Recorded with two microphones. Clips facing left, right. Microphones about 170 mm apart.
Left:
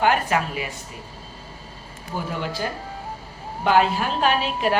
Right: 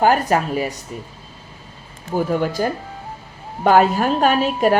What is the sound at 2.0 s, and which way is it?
A woman's voice, 45° right (ahead or behind).